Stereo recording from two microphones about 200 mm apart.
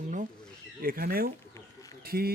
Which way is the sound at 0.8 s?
45° right (ahead or behind).